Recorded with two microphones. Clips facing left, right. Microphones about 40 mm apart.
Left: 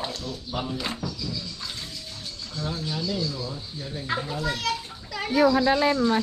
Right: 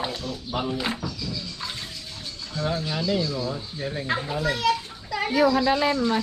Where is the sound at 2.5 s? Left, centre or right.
Right.